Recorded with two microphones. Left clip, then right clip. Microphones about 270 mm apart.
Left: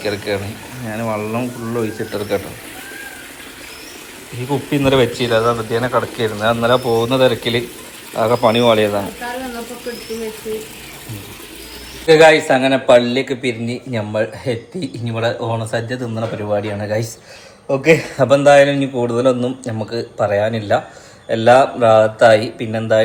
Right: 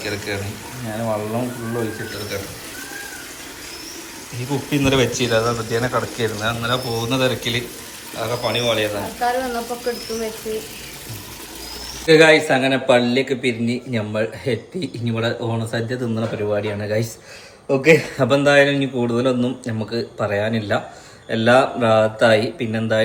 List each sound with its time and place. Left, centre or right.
0.0 s a man's voice: centre
4.5 s a man's voice: centre
8.3 s speech: centre
12.0 s a man's voice: centre